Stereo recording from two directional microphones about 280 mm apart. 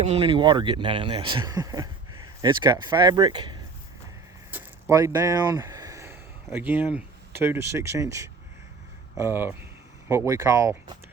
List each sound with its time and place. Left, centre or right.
0.0 s speech: right
4.5 s a sound: centre
7.4 s speech: centre